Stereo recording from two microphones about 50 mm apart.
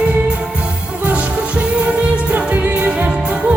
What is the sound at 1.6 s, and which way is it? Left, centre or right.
Music, right.